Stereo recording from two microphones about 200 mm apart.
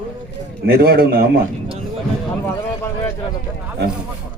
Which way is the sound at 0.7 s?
50° right (ahead or behind).